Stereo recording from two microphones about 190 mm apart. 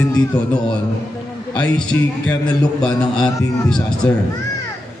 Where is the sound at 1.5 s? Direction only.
5° left (ahead or behind).